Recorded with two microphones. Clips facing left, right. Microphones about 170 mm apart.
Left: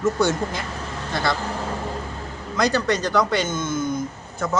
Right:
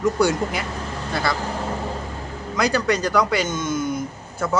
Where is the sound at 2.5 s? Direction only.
10° right (ahead or behind).